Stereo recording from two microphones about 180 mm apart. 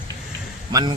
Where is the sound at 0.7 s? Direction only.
20° right (ahead or behind).